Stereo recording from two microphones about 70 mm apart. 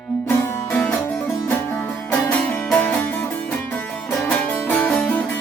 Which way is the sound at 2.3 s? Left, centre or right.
Centre.